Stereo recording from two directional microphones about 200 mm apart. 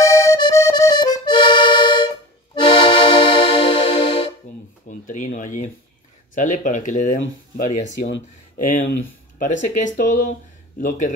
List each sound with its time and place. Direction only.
0.0 s accordion: 15° left (ahead or behind)
4.8 s a sound: 40° left (ahead or behind)
6.3 s speech: 40° left (ahead or behind)